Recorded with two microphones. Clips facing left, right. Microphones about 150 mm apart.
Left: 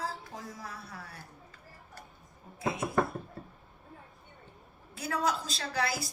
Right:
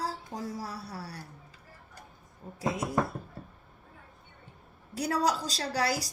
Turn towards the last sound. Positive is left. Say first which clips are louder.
# right 3 dB
turn(degrees=-35)  # may be behind; listen again after turning